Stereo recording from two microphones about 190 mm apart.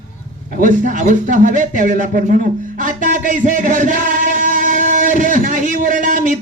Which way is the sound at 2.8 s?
45° right (ahead or behind).